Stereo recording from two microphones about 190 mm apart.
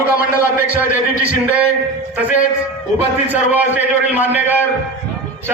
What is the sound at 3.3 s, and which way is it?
A man's voice, 10° right (ahead or behind).